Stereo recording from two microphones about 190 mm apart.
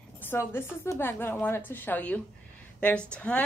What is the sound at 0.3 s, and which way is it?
A woman's voice, 10° left (ahead or behind).